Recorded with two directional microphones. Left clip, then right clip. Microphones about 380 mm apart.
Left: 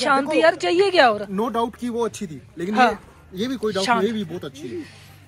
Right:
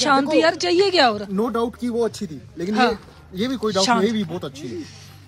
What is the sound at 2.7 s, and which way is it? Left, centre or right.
Speech, centre.